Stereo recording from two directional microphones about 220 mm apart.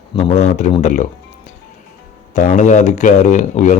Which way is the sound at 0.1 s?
25° left (ahead or behind).